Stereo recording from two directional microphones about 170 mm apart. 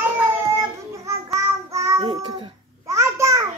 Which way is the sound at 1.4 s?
15° right (ahead or behind).